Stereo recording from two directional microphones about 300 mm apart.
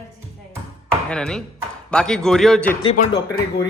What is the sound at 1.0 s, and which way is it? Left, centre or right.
Speech, centre.